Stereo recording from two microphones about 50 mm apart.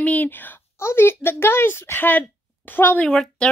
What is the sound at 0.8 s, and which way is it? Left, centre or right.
A woman's voice, left.